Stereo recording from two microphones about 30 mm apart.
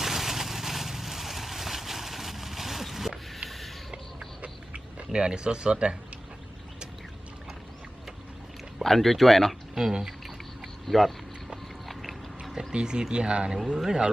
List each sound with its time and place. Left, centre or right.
0.0 s vehicle: centre
4.4 s pig: right
5.1 s speech: right
8.8 s speech: centre
9.9 s speech: centre
10.8 s speech: centre
12.7 s speech: right
13.7 s speech: centre